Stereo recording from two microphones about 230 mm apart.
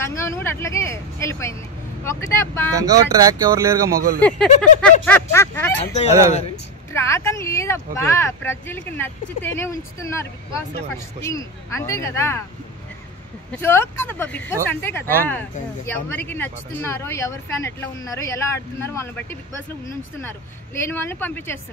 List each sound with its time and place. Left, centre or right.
0.0 s speech: centre
2.8 s speech: centre
3.9 s speech: right
4.2 s speech: centre
5.9 s speech: left
6.9 s speech: centre
13.5 s speech: centre